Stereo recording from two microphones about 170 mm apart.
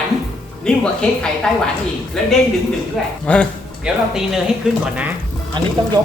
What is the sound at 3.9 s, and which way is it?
Speech, 5° right (ahead or behind).